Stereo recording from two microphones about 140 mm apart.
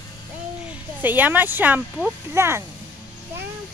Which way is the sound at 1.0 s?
15° right (ahead or behind).